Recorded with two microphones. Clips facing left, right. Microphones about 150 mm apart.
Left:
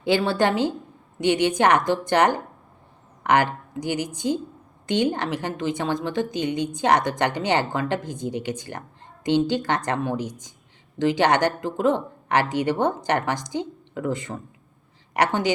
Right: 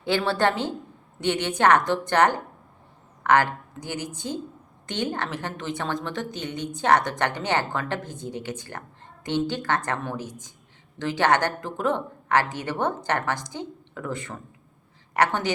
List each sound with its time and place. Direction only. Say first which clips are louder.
0.0 s a woman's voice: left 2 dB; 15° left (ahead or behind)